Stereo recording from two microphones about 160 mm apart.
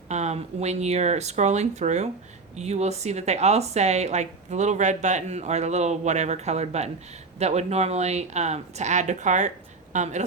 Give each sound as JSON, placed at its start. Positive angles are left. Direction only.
{"t": 0.1, "sound": "speech", "side_deg": -45}